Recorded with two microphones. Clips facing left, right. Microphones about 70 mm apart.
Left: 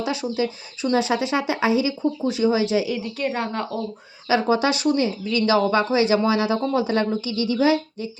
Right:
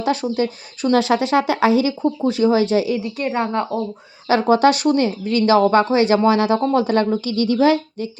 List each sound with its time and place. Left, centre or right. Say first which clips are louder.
0.0 s a woman's voice: right 4 dB; right
3.3 s speech: right 5 dB; right
4.3 s speech: right 5 dB; right